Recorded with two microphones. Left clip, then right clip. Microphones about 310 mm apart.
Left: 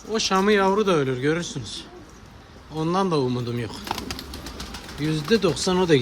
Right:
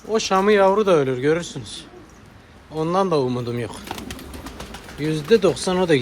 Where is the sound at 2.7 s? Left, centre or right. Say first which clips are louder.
Right 3 dB; centre.